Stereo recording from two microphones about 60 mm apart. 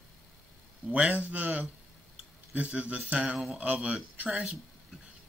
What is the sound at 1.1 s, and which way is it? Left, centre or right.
Speech, right.